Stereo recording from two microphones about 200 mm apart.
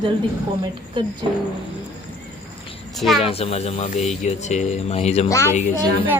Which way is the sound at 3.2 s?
30° left (ahead or behind).